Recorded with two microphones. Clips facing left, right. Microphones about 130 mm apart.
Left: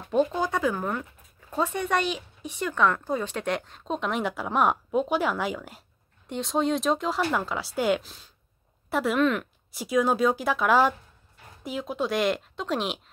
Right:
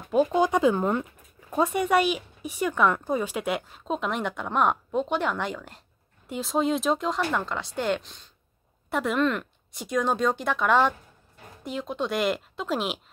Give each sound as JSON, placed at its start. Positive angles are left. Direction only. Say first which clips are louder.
{"t": 0.3, "sound": "speech", "louder": "right 5 dB", "side_deg": -20}
{"t": 1.5, "sound": "speech", "louder": "right 4 dB", "side_deg": -15}